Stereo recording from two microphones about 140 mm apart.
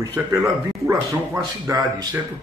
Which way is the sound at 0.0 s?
20° right (ahead or behind).